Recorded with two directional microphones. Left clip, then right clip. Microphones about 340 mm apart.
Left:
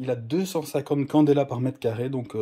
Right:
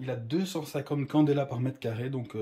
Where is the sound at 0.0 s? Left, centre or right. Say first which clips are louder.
Left 6 dB; centre.